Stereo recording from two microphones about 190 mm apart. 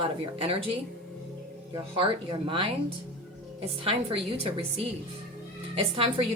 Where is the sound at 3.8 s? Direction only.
30° right (ahead or behind).